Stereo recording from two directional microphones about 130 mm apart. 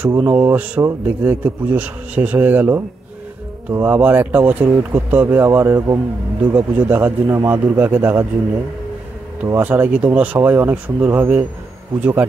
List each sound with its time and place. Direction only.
0.0 s speech: 15° right (ahead or behind)
9.6 s speech: 15° right (ahead or behind)